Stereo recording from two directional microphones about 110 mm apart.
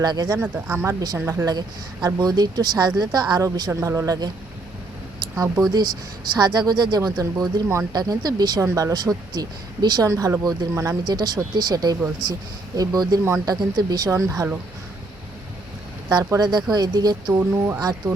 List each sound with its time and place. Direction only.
0.0 s speech: 40° right (ahead or behind)
0.3 s speech: 15° right (ahead or behind)
0.9 s a man's voice: 30° right (ahead or behind)
3.7 s a man's voice: 25° right (ahead or behind)
5.7 s speech: 40° right (ahead or behind); by 14.6 s 20° right (ahead or behind)
16.0 s speech: 35° right (ahead or behind)
17.3 s a man's voice: 20° right (ahead or behind)
18.0 s speech: 35° right (ahead or behind)